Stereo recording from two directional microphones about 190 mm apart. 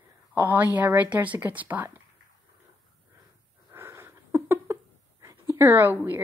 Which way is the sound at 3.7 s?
15° right (ahead or behind).